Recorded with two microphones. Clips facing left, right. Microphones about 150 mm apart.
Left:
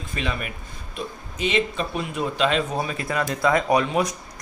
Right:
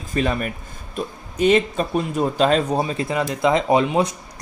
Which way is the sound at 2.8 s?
25° right (ahead or behind).